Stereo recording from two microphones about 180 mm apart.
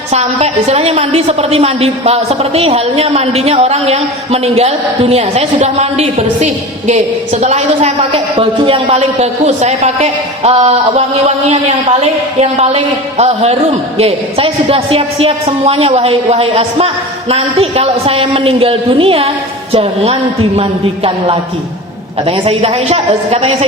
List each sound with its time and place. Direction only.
0.1 s a woman's voice: 35° right (ahead or behind)